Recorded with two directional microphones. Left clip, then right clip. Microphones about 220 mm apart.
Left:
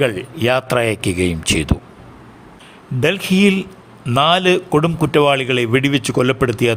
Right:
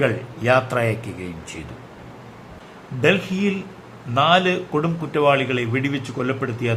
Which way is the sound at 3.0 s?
50° left (ahead or behind).